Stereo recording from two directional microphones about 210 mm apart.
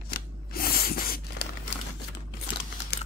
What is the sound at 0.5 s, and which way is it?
Spray, 45° left (ahead or behind).